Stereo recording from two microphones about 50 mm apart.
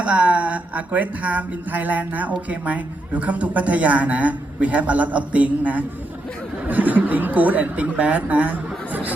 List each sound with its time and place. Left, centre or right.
0.0 s a woman's voice: right